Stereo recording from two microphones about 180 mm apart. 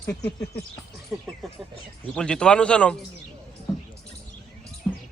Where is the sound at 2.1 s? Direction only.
5° left (ahead or behind).